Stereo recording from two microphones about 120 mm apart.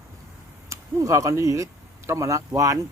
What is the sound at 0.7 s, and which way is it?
Speech, 25° right (ahead or behind).